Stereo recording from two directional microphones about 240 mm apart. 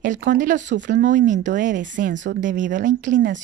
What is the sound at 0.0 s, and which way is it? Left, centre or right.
Speech, right.